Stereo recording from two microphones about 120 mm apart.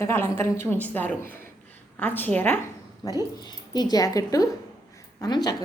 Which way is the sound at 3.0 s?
35° left (ahead or behind).